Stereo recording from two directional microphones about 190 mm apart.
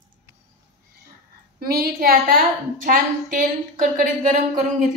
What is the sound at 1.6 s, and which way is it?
Speech, 50° right (ahead or behind).